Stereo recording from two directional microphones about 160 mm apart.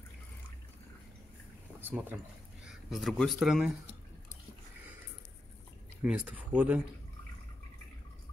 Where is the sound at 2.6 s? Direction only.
Centre (ahead or behind).